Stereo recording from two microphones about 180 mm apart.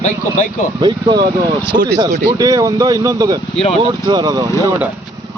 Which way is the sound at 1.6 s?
60° right (ahead or behind).